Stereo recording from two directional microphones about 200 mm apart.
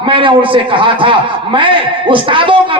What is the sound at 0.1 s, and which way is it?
A man's voice, 25° right (ahead or behind).